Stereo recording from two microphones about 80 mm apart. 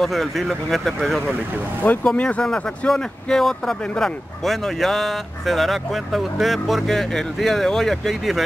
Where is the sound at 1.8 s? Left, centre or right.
Centre.